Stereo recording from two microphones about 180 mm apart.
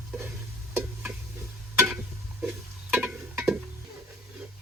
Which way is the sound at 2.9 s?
10° right (ahead or behind).